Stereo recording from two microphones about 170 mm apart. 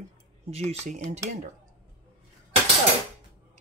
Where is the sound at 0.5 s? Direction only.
40° right (ahead or behind).